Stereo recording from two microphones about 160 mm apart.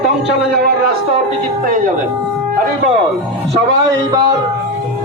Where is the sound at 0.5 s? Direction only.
80° right.